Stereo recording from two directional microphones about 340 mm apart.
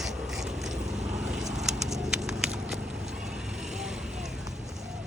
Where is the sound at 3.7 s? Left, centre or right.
Centre.